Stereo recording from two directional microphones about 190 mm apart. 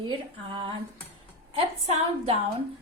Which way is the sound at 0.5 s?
30° right (ahead or behind).